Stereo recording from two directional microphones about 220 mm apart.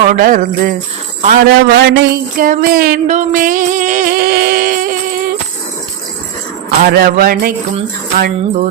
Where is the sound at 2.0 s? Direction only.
40° right (ahead or behind).